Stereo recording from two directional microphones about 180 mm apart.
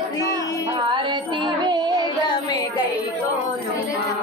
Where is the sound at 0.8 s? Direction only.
25° right (ahead or behind).